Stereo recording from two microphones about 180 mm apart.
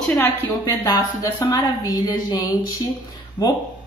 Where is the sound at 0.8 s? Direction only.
20° left (ahead or behind).